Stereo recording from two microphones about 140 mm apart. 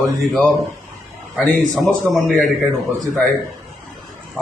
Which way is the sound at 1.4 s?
Centre (ahead or behind).